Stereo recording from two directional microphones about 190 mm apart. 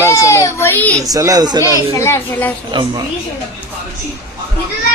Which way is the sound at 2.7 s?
25° right (ahead or behind).